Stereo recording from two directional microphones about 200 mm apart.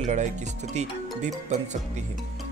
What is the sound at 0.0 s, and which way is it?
Speech, 35° right (ahead or behind).